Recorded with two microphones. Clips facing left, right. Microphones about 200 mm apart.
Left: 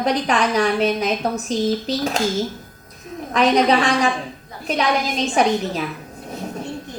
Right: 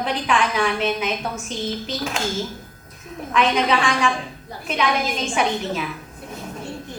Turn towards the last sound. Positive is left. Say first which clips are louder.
# left 4 dB
turn(degrees=40)  # may be behind; listen again after turning